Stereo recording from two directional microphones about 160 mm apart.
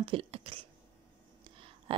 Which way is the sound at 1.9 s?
35° right (ahead or behind).